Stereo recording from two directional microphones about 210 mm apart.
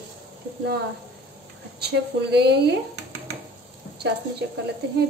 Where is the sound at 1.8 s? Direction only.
50° right (ahead or behind).